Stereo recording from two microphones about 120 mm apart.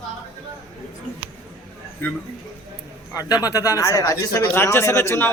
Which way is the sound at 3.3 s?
30° left (ahead or behind).